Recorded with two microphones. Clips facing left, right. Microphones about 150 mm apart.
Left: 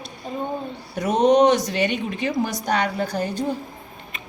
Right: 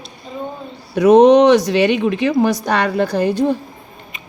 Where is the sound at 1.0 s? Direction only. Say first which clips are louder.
Right 8 dB; 70° right (ahead or behind).